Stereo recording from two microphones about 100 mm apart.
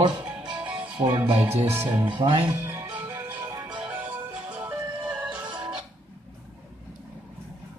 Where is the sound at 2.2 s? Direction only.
50° right (ahead or behind).